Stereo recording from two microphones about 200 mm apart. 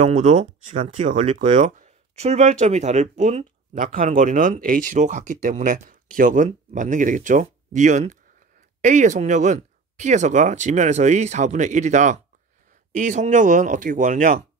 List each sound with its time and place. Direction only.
0.0 s speech: 35° right (ahead or behind)